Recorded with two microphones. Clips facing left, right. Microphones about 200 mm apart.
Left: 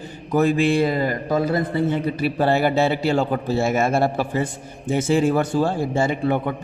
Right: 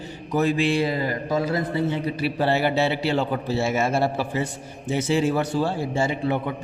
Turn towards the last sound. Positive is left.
turn(degrees=50)  # may be behind; listen again after turning